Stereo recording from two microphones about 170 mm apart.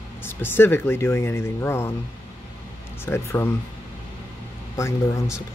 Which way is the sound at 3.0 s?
15° left (ahead or behind).